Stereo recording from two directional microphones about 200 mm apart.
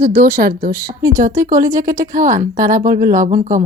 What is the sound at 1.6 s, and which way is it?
A woman's voice, 15° right (ahead or behind).